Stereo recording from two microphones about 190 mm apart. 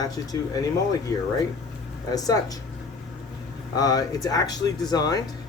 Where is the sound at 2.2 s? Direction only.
20° left (ahead or behind).